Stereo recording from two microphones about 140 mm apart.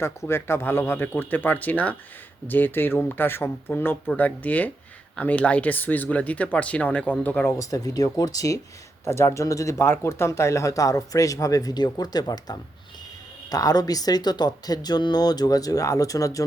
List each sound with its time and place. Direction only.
0.0 s speech: 20° left (ahead or behind)
7.6 s speech: 25° left (ahead or behind)